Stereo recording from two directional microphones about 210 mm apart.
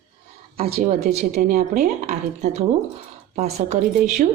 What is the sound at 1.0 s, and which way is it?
Speech, 30° right (ahead or behind).